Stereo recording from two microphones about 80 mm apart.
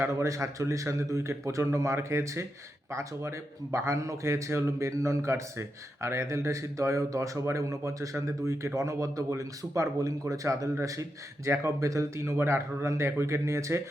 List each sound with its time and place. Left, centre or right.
0.0 s a man's voice: right